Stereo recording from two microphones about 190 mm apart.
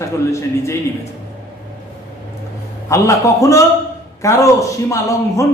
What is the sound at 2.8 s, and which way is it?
A man's voice, 15° left (ahead or behind).